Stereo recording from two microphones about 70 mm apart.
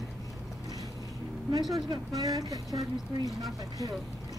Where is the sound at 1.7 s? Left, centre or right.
Right.